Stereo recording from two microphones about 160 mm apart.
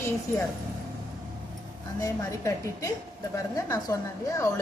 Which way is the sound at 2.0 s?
20° left (ahead or behind).